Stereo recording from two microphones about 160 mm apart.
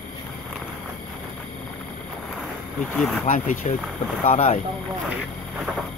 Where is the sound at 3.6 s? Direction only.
45° left (ahead or behind).